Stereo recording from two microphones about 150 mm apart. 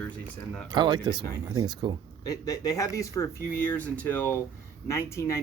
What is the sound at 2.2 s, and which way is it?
Speech, 25° left (ahead or behind).